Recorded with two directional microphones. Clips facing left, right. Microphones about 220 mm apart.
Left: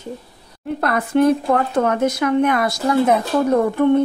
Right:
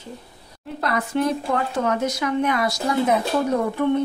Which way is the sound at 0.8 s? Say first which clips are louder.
Left 6 dB; 55° left (ahead or behind).